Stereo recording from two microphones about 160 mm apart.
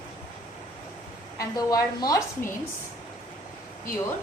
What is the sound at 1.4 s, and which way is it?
A woman's voice, 25° left (ahead or behind).